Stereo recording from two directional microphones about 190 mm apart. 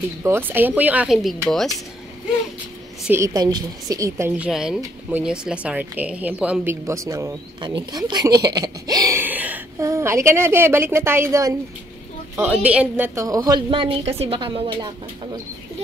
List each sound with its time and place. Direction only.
0.2 s speech: 10° right (ahead or behind)
3.1 s speech: 15° right (ahead or behind)
4.5 s a woman's voice: 5° right (ahead or behind); by 14.9 s 25° right (ahead or behind)